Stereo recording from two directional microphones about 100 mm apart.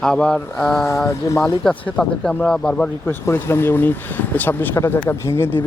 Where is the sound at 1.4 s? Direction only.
10° left (ahead or behind).